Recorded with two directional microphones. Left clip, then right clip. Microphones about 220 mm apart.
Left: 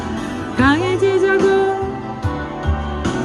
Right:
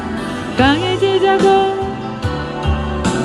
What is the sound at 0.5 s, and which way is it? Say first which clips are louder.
Music: right 1 dB; 10° left (ahead or behind).